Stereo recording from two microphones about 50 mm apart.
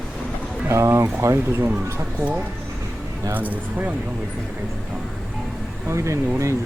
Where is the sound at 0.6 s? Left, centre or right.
Right.